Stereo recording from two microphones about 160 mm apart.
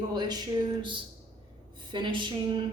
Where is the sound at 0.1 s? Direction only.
25° right (ahead or behind).